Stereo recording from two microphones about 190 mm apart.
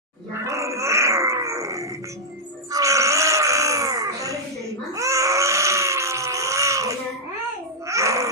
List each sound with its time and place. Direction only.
0.4 s dog: 15° right (ahead or behind)
2.7 s baby cry: 15° right (ahead or behind)
7.9 s babbling: 15° right (ahead or behind)